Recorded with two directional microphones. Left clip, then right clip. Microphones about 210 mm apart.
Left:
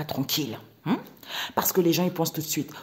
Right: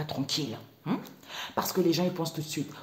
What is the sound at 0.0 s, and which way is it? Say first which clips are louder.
Speech: left 3 dB; 35° left (ahead or behind).